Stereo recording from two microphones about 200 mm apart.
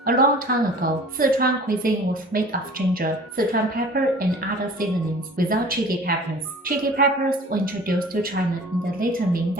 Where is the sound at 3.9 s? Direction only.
50° right (ahead or behind).